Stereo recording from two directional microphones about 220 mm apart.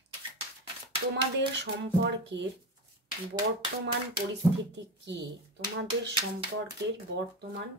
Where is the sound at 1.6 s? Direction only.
55° right (ahead or behind).